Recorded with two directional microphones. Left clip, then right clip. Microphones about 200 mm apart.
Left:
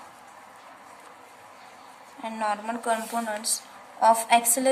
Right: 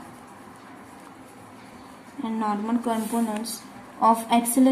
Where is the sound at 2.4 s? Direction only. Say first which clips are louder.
Right 1 dB; 30° left (ahead or behind).